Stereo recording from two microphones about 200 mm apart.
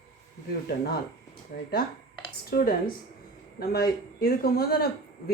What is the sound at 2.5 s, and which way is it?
Speech, 45° left (ahead or behind).